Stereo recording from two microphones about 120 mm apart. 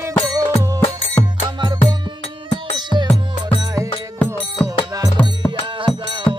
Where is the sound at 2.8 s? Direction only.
40° right (ahead or behind).